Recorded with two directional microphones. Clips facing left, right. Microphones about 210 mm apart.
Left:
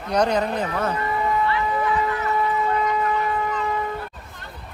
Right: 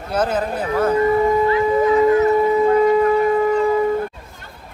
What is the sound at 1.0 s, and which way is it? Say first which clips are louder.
Shofar: right 8 dB; 40° right (ahead or behind).